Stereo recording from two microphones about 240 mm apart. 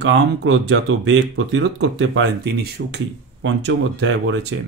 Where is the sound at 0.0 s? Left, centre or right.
Right.